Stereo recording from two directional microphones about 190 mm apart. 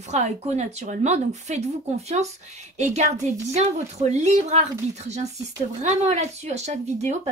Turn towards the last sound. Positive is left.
turn(degrees=-35)  # may be behind; listen again after turning